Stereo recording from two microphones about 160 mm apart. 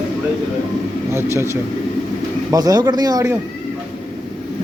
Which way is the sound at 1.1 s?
15° right (ahead or behind).